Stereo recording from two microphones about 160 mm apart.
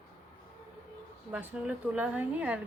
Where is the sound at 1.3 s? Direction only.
10° right (ahead or behind).